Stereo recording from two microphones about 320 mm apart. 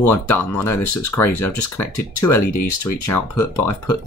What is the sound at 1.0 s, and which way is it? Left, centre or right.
Speech, centre.